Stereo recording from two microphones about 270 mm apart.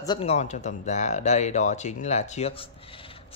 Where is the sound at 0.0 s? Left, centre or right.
Centre.